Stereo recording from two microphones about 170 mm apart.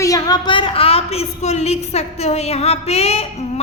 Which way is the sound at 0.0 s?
20° left (ahead or behind).